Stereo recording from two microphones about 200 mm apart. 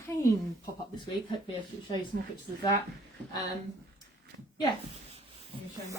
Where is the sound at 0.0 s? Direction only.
15° left (ahead or behind).